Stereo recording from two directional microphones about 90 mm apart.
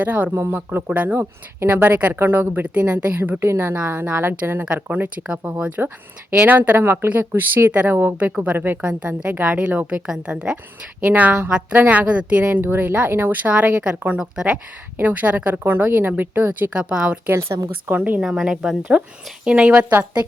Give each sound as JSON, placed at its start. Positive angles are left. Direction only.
{"t": 0.0, "sound": "speech", "side_deg": -15}
{"t": 18.3, "sound": "speech", "side_deg": -5}